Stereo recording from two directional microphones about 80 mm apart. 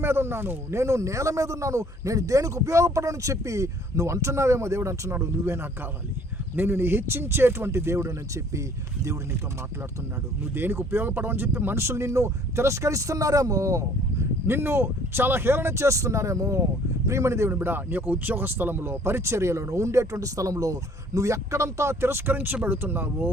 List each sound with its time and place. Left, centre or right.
0.0 s speech: right
10.5 s speech: right